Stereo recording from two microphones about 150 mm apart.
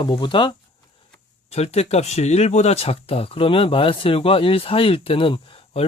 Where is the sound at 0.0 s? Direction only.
35° left (ahead or behind).